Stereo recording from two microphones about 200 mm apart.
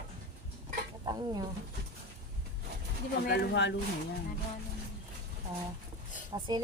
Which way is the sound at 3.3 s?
60° left (ahead or behind).